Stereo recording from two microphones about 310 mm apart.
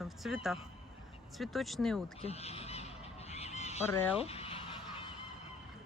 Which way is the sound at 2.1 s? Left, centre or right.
Centre.